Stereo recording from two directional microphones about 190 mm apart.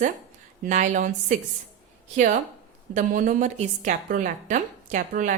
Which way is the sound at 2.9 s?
45° right (ahead or behind).